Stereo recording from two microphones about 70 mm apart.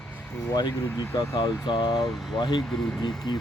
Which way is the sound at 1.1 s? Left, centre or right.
Left.